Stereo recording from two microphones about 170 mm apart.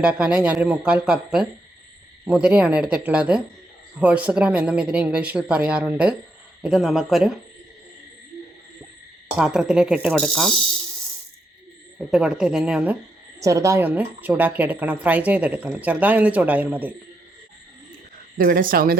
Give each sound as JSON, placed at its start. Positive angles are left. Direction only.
{"t": 0.0, "sound": "speech", "side_deg": -5}
{"t": 9.4, "sound": "speech", "side_deg": -5}
{"t": 12.1, "sound": "speech", "side_deg": -5}
{"t": 13.4, "sound": "speech", "side_deg": -20}
{"t": 18.3, "sound": "speech", "side_deg": -55}